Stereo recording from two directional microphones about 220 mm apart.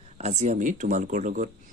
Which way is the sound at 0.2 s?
30° right (ahead or behind).